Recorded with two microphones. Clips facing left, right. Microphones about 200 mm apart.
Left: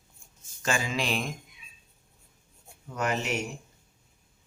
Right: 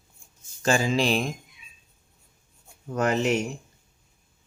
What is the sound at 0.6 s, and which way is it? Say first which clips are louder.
Speech: right 7 dB; 35° right (ahead or behind).